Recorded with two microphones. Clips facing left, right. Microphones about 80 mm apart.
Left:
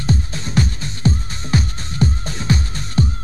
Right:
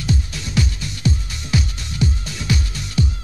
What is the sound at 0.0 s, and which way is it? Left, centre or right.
Music, left.